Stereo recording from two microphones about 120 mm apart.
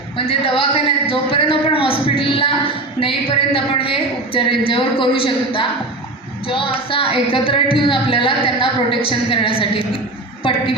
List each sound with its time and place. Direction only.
0.2 s speech: 50° left (ahead or behind)